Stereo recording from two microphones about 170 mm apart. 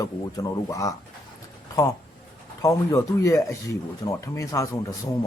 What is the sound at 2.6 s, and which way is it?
Speech, 20° left (ahead or behind).